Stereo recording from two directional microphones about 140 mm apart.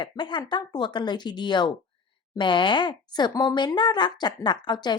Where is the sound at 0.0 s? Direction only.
35° left (ahead or behind).